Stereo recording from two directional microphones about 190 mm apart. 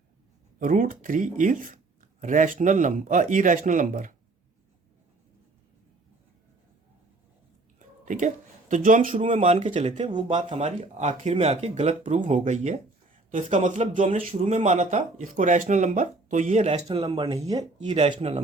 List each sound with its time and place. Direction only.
0.6 s speech: 45° right (ahead or behind)
8.0 s speech: 40° right (ahead or behind)
9.2 s speech: 30° right (ahead or behind)
10.4 s speech: 35° right (ahead or behind); by 17.9 s 20° right (ahead or behind)
17.9 s speech: 30° right (ahead or behind)